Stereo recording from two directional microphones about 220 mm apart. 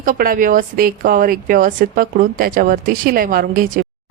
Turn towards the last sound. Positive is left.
turn(degrees=-40)  # may be behind; listen again after turning